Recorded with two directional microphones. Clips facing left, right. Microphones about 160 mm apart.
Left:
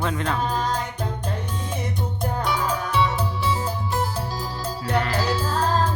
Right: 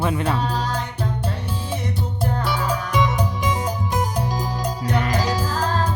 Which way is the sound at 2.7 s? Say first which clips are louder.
Right 1 dB; 15° right (ahead or behind).